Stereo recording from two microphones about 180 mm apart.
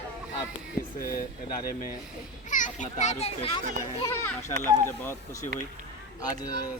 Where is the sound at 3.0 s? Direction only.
40° left (ahead or behind).